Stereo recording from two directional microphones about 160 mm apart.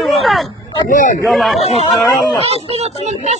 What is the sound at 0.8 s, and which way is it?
Speech, 55° left (ahead or behind).